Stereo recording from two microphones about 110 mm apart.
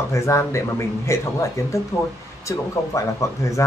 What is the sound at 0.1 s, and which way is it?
Speech, 30° left (ahead or behind).